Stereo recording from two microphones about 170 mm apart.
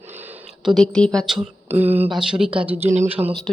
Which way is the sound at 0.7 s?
5° left (ahead or behind).